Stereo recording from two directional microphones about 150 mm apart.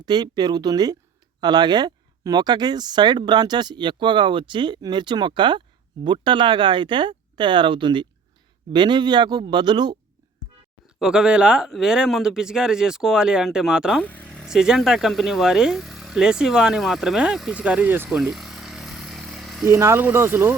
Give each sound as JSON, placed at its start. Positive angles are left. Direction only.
{"t": 0.0, "sound": "speech", "side_deg": -25}
{"t": 10.8, "sound": "speech", "side_deg": -5}
{"t": 14.0, "sound": "speech", "side_deg": 10}
{"t": 18.2, "sound": "a sound", "side_deg": 0}
{"t": 19.6, "sound": "speech", "side_deg": -15}